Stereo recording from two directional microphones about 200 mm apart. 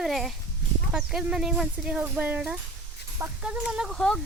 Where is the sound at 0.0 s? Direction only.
Centre (ahead or behind).